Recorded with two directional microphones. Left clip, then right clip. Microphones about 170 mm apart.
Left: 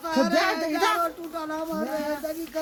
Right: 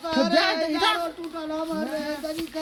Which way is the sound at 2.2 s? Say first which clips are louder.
Even; 30° left (ahead or behind).